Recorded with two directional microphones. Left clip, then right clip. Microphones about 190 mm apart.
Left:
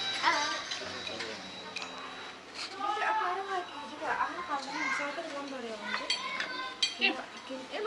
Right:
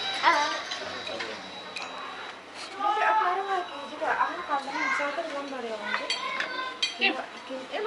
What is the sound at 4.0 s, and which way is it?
A child's voice, 20° left (ahead or behind).